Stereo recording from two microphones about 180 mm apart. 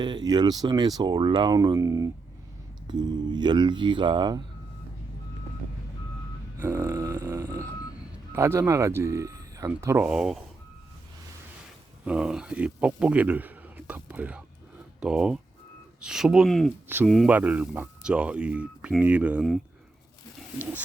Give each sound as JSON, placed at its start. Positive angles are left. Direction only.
{"t": 0.0, "sound": "speech", "side_deg": -25}
{"t": 6.6, "sound": "speech", "side_deg": -15}
{"t": 10.1, "sound": "speech", "side_deg": -5}
{"t": 12.0, "sound": "speech", "side_deg": -5}